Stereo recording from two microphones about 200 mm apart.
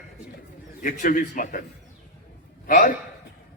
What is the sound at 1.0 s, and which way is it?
Speech, 40° left (ahead or behind).